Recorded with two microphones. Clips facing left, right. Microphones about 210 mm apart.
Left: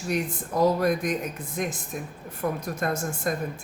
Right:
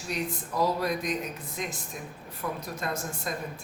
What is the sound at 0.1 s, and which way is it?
Speech, 50° left (ahead or behind).